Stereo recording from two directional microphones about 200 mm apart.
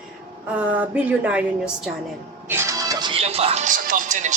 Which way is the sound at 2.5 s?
15° right (ahead or behind).